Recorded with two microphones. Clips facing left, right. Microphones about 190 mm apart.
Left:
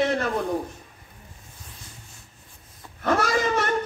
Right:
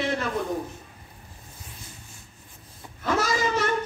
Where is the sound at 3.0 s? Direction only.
60° left (ahead or behind).